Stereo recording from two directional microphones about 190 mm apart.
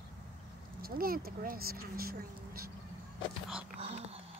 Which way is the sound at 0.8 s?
50° right (ahead or behind).